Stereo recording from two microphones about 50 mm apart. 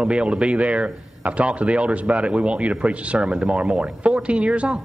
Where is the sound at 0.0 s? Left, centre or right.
Right.